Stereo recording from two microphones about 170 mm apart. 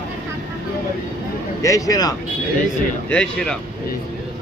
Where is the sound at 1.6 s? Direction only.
20° left (ahead or behind).